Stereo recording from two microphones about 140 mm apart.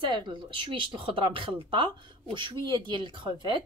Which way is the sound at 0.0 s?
35° right (ahead or behind).